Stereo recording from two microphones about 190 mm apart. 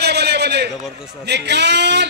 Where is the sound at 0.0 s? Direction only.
60° right (ahead or behind).